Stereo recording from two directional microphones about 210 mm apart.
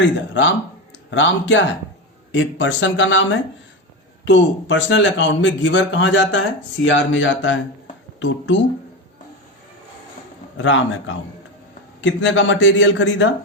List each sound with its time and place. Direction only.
0.0 s a man's voice: 60° left (ahead or behind)
10.6 s a man's voice: 65° left (ahead or behind)